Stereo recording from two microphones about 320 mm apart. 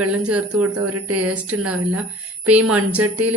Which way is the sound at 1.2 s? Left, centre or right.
Centre.